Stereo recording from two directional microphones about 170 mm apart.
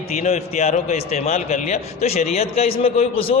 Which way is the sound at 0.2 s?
40° left (ahead or behind).